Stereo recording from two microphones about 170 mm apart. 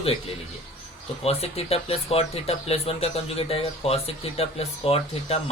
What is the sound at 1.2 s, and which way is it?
Speech, 35° left (ahead or behind).